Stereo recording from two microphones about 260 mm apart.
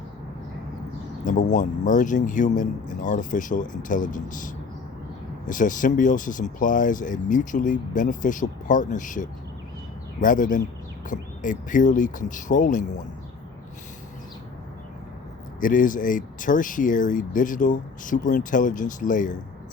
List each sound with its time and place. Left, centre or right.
1.2 s speech: left
15.6 s speech: left